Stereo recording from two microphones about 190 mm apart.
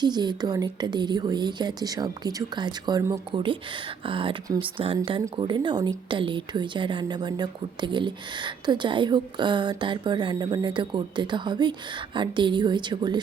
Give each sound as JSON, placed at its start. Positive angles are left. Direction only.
{"t": 0.0, "sound": "a woman's voice", "side_deg": -20}